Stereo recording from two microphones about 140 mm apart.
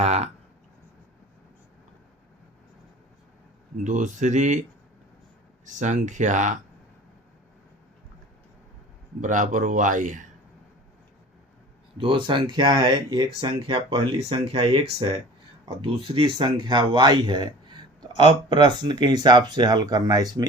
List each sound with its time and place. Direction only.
0.0 s a sound: 50° right (ahead or behind)
3.8 s speech: 60° right (ahead or behind)
5.6 s speech: 60° right (ahead or behind)
9.2 s speech: 65° right (ahead or behind)
11.9 s speech: 35° right (ahead or behind)